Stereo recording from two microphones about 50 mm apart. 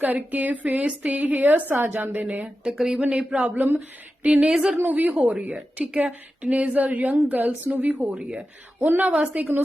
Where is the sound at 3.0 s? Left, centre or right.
Right.